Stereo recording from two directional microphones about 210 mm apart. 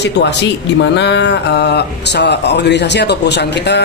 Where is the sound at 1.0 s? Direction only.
55° left (ahead or behind).